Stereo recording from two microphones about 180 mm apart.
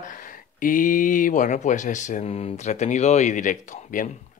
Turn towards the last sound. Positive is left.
turn(degrees=45)  # may be behind; listen again after turning